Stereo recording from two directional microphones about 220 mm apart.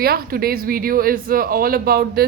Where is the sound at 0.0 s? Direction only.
45° right (ahead or behind).